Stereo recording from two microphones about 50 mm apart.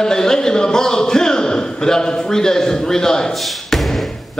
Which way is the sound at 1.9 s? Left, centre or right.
Centre.